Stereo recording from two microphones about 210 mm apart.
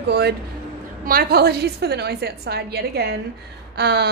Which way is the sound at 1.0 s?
45° right (ahead or behind).